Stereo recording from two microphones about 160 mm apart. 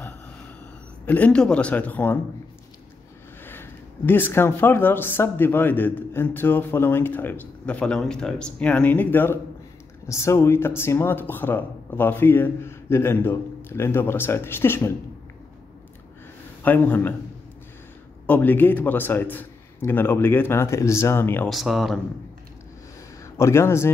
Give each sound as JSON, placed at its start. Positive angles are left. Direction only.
{"t": 1.0, "sound": "speech", "side_deg": 10}
{"t": 3.4, "sound": "speech", "side_deg": 10}
{"t": 16.6, "sound": "speech", "side_deg": 10}
{"t": 18.2, "sound": "speech", "side_deg": 10}
{"t": 21.5, "sound": "speech", "side_deg": 0}
{"t": 23.3, "sound": "speech", "side_deg": 15}